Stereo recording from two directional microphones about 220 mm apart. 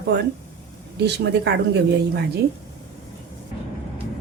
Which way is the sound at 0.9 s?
50° right (ahead or behind).